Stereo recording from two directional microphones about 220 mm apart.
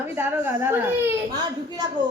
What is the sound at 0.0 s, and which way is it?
A woman's voice, 10° right (ahead or behind).